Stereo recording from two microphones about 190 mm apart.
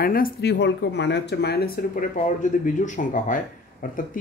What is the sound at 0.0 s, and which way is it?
Speech, 50° left (ahead or behind).